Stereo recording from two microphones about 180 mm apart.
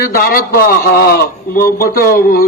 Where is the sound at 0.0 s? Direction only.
55° left (ahead or behind).